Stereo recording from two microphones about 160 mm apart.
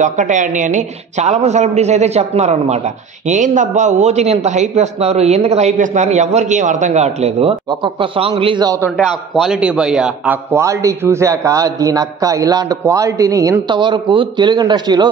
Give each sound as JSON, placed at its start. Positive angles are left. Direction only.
{"t": 0.0, "sound": "a woman's voice", "side_deg": -50}
{"t": 8.9, "sound": "a man's voice", "side_deg": 0}